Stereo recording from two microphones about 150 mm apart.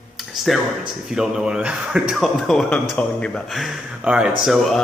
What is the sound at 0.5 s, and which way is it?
Speech, centre (ahead or behind).